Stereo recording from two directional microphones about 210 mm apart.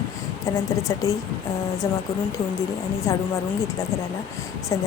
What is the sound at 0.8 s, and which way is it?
Speech, 15° left (ahead or behind).